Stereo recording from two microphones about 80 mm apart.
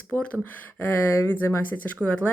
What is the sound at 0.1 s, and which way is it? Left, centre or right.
Speech, centre.